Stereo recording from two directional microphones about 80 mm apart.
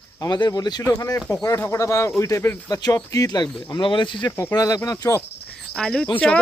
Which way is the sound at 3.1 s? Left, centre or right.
Left.